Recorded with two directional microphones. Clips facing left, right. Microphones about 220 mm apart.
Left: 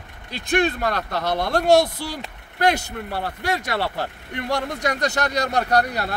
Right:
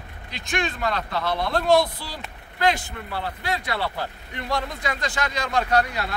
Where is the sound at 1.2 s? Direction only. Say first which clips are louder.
Left 3 dB; 45° left (ahead or behind).